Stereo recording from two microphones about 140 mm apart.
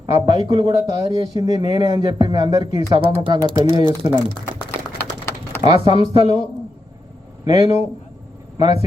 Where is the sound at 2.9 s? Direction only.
35° right (ahead or behind).